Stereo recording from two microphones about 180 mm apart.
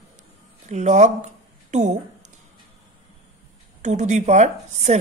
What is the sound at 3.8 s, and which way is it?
Speech, 40° right (ahead or behind).